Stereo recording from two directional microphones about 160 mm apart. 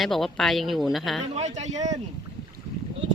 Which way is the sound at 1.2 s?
40° right (ahead or behind).